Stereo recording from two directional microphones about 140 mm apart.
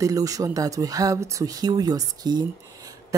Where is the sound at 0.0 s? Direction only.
25° right (ahead or behind).